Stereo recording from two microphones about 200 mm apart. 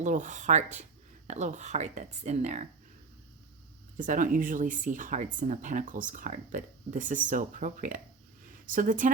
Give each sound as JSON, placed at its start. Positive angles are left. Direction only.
{"t": 0.0, "sound": "speech", "side_deg": -35}
{"t": 3.9, "sound": "speech", "side_deg": -40}